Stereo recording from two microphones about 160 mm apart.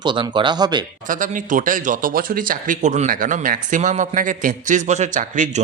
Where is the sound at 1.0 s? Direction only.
55° right (ahead or behind).